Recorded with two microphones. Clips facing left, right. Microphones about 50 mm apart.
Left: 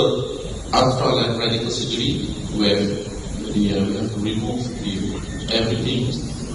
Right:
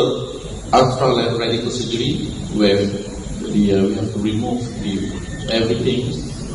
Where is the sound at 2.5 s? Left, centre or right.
Right.